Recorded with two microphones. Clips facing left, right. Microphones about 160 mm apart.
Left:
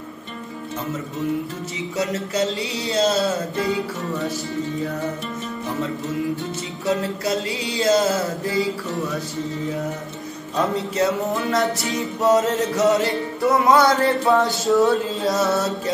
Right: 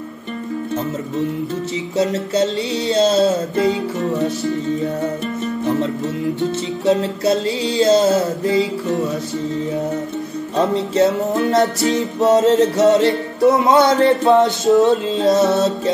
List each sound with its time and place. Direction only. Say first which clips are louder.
2.9 s music: right 5 dB; 25° right (ahead or behind)
6.9 s music: right 6 dB; 30° right (ahead or behind)
11.5 s music: right 6 dB; 25° right (ahead or behind)